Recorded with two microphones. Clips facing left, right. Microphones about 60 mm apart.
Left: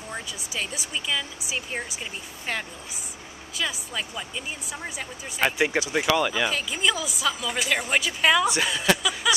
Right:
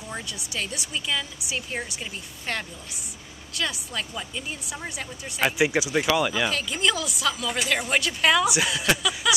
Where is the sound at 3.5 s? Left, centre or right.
Centre.